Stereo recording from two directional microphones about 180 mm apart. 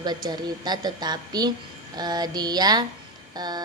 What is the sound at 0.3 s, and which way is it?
A woman's voice, 25° right (ahead or behind).